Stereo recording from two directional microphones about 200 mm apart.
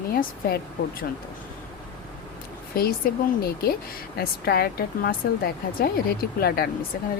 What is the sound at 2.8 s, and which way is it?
Speech, 50° left (ahead or behind).